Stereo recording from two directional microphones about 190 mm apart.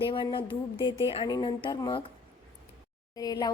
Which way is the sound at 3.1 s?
20° left (ahead or behind).